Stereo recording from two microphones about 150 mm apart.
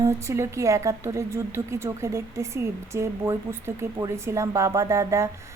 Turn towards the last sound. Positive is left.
turn(degrees=-20)  # may be behind; listen again after turning